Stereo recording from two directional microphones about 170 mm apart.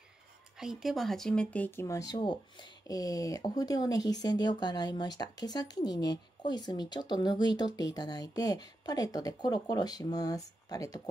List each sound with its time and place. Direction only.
0.6 s speech: centre (ahead or behind); by 11.0 s 20° left (ahead or behind)